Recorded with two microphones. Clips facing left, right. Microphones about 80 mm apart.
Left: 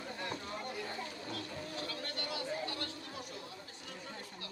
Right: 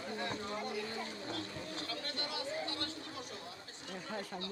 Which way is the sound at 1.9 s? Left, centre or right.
Right.